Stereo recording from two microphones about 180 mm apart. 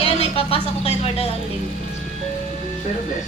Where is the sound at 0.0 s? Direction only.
30° left (ahead or behind).